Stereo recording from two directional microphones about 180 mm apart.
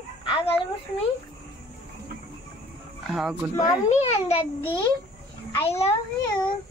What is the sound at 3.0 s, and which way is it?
Speech, centre (ahead or behind).